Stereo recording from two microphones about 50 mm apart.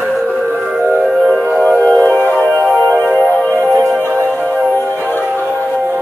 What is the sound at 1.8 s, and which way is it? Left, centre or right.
Music, left.